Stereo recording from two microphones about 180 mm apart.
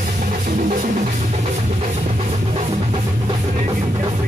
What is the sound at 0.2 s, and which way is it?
Music, 45° right (ahead or behind).